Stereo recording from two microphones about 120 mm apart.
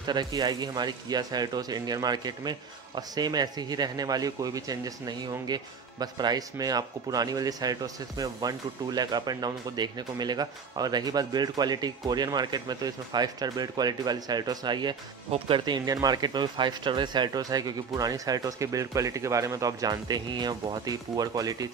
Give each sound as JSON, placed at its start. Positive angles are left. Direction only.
{"t": 0.0, "sound": "speech", "side_deg": -35}